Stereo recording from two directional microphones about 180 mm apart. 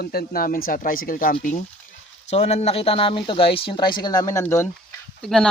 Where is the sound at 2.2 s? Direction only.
35° left (ahead or behind); by 4.6 s 15° left (ahead or behind).